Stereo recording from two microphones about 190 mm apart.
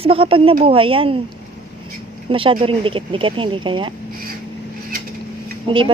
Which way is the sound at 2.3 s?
25° right (ahead or behind).